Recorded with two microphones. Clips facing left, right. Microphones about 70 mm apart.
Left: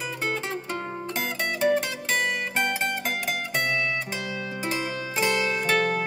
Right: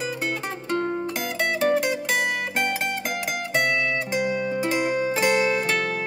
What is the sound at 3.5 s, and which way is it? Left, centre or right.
Music, centre.